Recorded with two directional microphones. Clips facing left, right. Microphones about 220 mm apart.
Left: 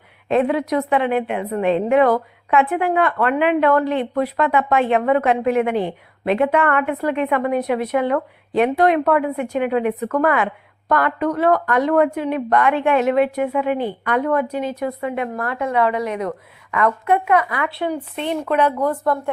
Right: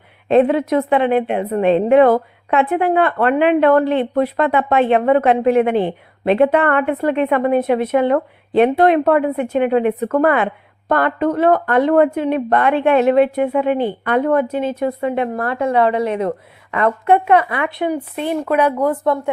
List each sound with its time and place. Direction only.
0.3 s a woman's voice: 30° right (ahead or behind); by 18.9 s 10° right (ahead or behind)